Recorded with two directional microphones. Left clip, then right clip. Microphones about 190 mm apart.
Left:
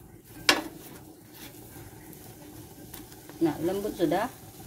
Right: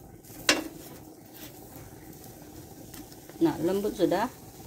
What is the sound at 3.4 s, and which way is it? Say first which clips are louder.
Speech: right 2 dB; 20° right (ahead or behind).